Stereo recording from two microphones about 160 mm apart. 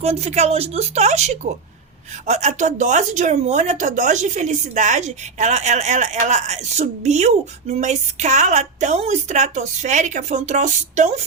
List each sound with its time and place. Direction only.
0.0 s speech: 45° right (ahead or behind)